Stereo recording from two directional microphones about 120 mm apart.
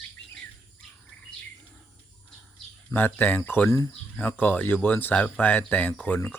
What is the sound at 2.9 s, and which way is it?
Speech, 15° left (ahead or behind).